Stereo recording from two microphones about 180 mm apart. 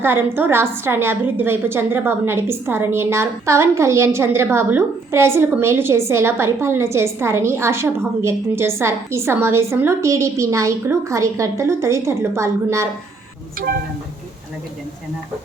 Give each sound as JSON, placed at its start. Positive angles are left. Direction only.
{"t": 0.0, "sound": "a woman's voice", "side_deg": -10}